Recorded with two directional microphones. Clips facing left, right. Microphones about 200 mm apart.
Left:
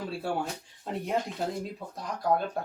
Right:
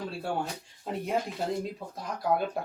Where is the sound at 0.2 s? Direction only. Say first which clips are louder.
Even; 5° left (ahead or behind).